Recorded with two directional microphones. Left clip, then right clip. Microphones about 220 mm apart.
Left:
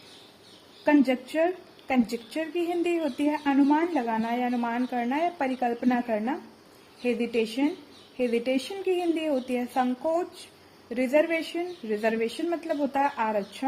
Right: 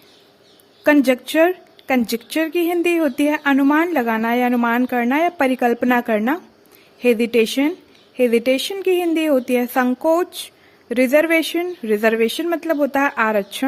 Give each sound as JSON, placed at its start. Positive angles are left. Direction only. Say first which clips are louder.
{"t": 0.9, "sound": "speech", "louder": "right 8 dB", "side_deg": -45}